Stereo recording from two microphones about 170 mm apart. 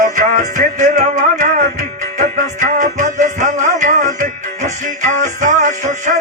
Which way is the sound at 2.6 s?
45° right (ahead or behind).